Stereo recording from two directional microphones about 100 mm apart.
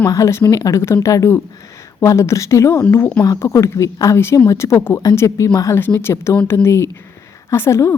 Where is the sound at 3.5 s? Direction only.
30° left (ahead or behind).